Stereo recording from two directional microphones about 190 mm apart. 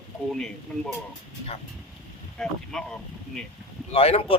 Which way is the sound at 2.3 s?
5° left (ahead or behind).